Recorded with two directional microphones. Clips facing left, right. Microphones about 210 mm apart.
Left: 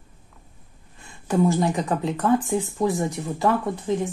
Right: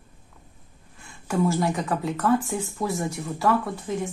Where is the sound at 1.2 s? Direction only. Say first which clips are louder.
Left 3 dB; 20° left (ahead or behind).